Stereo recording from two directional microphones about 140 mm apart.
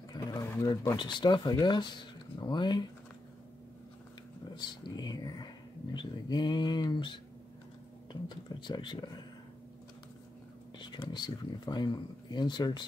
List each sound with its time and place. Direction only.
0.1 s speech: 25° left (ahead or behind)
4.6 s speech: 30° left (ahead or behind)
10.8 s speech: 35° left (ahead or behind)